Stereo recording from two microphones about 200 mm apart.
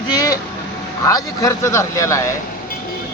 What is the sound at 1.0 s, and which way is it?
Speech, 15° left (ahead or behind).